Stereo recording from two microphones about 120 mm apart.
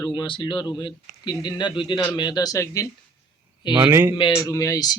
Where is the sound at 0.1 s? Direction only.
40° left (ahead or behind).